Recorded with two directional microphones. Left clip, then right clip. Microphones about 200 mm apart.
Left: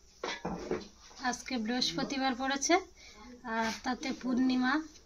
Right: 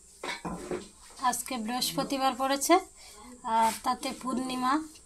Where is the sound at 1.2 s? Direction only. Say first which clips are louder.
Right 5 dB; 20° right (ahead or behind).